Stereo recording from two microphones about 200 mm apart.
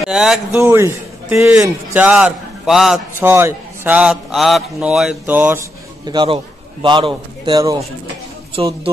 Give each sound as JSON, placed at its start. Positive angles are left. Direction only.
{"t": 0.1, "sound": "speech", "side_deg": 0}
{"t": 0.6, "sound": "a man's voice", "side_deg": -10}
{"t": 6.0, "sound": "a man's voice", "side_deg": -25}